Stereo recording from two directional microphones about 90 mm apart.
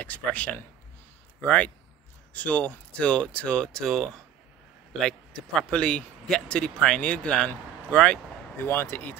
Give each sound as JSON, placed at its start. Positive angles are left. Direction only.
{"t": 0.0, "sound": "speech", "side_deg": 15}
{"t": 8.5, "sound": "speech", "side_deg": 25}